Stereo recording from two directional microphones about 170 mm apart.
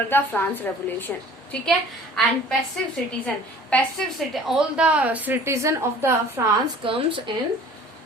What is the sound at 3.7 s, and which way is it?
Speech, 10° left (ahead or behind).